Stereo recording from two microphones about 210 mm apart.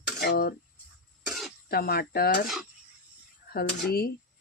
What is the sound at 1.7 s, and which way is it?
Speech, 45° left (ahead or behind).